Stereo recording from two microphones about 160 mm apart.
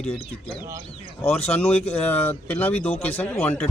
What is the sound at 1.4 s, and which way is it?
Speech, 5° left (ahead or behind).